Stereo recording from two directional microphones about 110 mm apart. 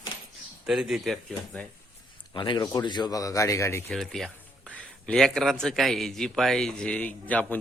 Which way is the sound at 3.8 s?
Centre (ahead or behind).